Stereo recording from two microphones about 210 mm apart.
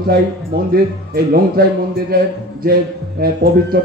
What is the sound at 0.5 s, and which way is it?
Speech, 45° right (ahead or behind).